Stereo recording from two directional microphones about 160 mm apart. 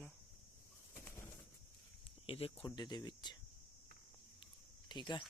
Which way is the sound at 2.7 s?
25° left (ahead or behind).